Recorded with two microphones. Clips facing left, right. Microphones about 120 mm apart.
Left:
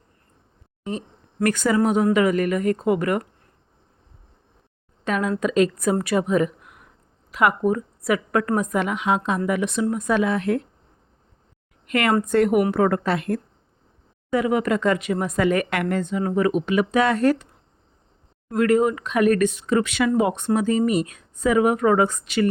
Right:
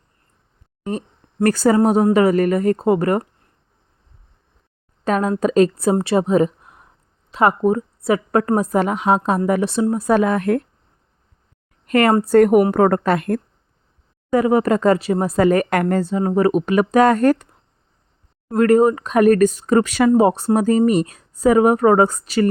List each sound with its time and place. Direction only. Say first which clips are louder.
1.4 s speech: right 5 dB; 35° right (ahead or behind)
5.0 s a woman's voice: right 5 dB; 40° right (ahead or behind)
11.9 s a woman's voice: right 6 dB; 40° right (ahead or behind)
14.3 s speech: right 5 dB; 40° right (ahead or behind)